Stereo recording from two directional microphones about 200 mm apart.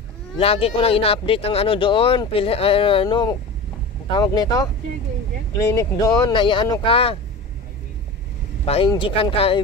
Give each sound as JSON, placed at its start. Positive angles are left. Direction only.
{"t": 0.4, "sound": "speech", "side_deg": 30}
{"t": 5.8, "sound": "speech", "side_deg": 20}
{"t": 8.6, "sound": "speech", "side_deg": 25}